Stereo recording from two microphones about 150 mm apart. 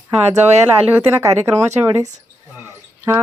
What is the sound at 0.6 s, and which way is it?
Speech, 15° right (ahead or behind).